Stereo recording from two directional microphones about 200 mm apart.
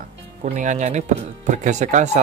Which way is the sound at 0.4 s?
35° right (ahead or behind).